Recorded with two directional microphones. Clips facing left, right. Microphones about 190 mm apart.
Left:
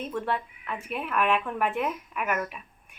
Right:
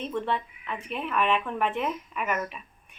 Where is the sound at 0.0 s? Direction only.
5° left (ahead or behind).